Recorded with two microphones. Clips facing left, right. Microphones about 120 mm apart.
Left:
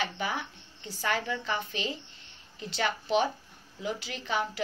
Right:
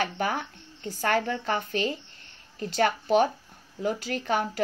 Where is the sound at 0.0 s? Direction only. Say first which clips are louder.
Right 4 dB; 50° right (ahead or behind).